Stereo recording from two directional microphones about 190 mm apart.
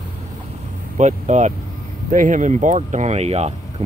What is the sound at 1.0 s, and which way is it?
Speech, 40° right (ahead or behind).